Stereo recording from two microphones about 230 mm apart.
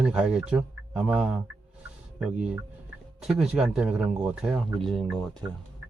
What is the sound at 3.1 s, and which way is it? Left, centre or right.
Speech, centre.